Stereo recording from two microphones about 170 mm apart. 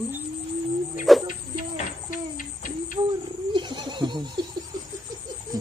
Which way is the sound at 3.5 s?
25° right (ahead or behind).